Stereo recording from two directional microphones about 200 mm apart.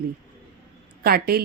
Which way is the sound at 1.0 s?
50° right (ahead or behind).